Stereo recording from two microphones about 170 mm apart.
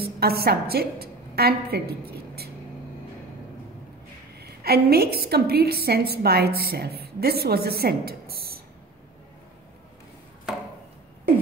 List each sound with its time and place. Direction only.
0.0 s a woman's voice: 65° right (ahead or behind)
4.4 s a woman's voice: 65° right (ahead or behind)